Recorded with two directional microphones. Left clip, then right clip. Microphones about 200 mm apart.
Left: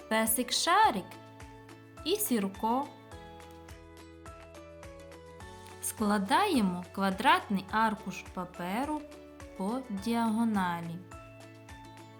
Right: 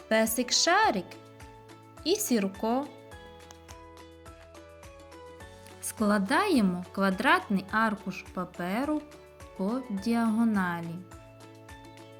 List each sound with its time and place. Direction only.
0.1 s speech: centre (ahead or behind)
2.0 s speech: centre (ahead or behind)
5.8 s a woman's voice: 15° right (ahead or behind)